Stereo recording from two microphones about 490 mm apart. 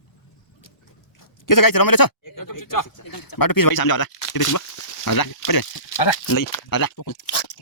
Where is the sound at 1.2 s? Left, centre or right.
Left.